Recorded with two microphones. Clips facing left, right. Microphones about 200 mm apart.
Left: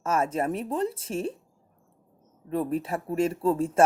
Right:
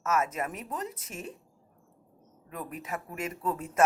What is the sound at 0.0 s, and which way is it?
Speech, 30° left (ahead or behind).